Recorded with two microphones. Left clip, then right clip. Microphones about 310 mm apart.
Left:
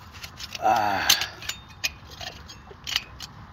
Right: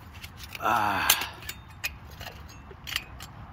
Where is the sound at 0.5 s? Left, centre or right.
Centre.